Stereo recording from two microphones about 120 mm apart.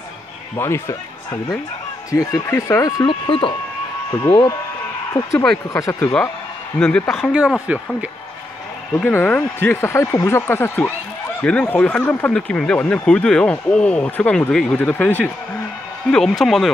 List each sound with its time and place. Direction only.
0.6 s speech: 20° left (ahead or behind)
2.0 s speech: 25° left (ahead or behind)
3.1 s speech: 45° left (ahead or behind)
5.7 s speech: 25° left (ahead or behind)
6.8 s speech: 10° left (ahead or behind)
7.6 s speech: 10° right (ahead or behind)
8.9 s speech: 15° left (ahead or behind)
16.1 s speech: centre (ahead or behind)